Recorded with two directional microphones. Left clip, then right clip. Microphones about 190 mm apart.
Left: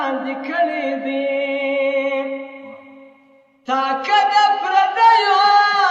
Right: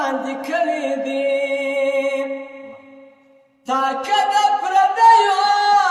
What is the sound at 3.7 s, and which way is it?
Singing, 15° right (ahead or behind).